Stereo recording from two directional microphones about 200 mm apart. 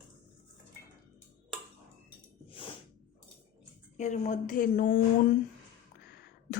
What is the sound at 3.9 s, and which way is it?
A woman's voice, 35° left (ahead or behind).